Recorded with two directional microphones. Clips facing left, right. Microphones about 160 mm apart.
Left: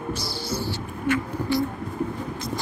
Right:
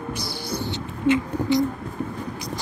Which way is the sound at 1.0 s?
20° right (ahead or behind).